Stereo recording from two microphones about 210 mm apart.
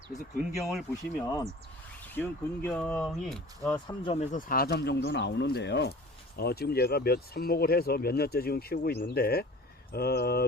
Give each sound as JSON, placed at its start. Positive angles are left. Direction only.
{"t": 0.6, "sound": "speech", "side_deg": 0}
{"t": 2.1, "sound": "speech", "side_deg": 10}
{"t": 3.8, "sound": "speech", "side_deg": 25}